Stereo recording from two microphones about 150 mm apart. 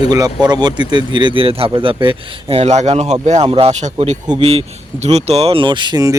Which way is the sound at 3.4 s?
35° right (ahead or behind).